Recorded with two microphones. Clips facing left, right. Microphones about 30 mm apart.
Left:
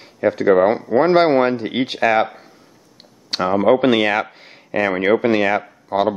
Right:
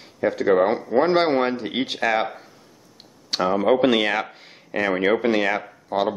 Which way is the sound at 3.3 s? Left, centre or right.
Centre.